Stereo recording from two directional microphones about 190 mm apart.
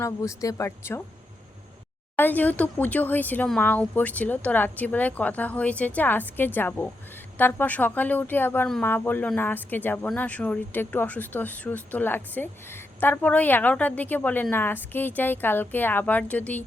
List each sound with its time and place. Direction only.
0.0 s speech: 15° left (ahead or behind)
2.1 s speech: 10° left (ahead or behind)